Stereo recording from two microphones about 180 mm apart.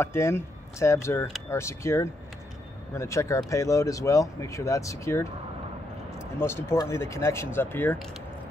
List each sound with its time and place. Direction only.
0.0 s speech: 15° left (ahead or behind)